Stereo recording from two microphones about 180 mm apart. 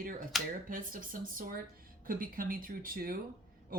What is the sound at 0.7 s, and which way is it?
Speech, 50° right (ahead or behind).